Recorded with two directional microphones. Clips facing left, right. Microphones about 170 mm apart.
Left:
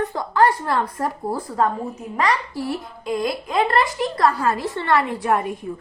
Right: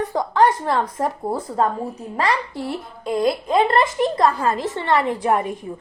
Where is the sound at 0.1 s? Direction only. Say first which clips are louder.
Right 1 dB; 15° right (ahead or behind).